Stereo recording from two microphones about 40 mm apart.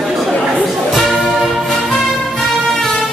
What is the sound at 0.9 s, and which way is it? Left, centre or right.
Music, centre.